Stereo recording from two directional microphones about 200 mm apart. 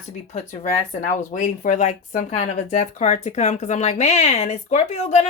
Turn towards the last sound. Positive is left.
turn(degrees=30)  # may be behind; listen again after turning